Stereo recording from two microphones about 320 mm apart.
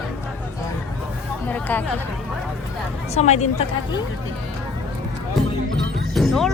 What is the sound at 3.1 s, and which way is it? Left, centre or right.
Speech, left.